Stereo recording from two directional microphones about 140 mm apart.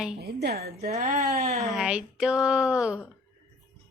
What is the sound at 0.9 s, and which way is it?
Speech, 55° right (ahead or behind).